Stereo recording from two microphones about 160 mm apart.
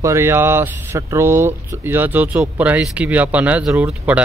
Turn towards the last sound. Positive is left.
turn(degrees=-10)  # may be behind; listen again after turning